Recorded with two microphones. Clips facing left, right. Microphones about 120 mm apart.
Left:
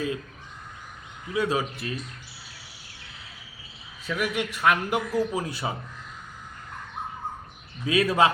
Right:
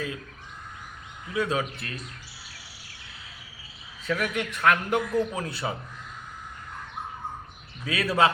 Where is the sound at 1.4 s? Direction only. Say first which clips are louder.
Left 1 dB; 10° left (ahead or behind).